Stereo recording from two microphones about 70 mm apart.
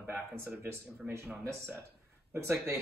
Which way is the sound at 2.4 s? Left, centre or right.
Right.